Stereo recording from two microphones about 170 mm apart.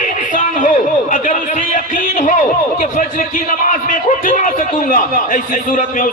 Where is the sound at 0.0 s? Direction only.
50° left (ahead or behind).